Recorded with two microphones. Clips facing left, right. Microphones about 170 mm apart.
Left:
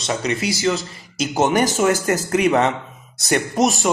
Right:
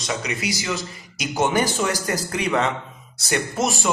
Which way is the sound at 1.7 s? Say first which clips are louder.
Left 6 dB; 50° left (ahead or behind).